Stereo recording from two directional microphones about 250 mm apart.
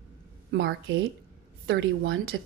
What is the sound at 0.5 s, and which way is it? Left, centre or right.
A woman's voice, right.